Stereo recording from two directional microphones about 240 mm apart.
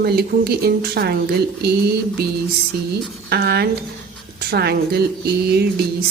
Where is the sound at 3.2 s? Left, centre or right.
Right.